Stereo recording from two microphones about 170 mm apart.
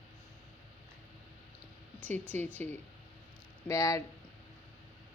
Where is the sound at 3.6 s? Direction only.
20° left (ahead or behind).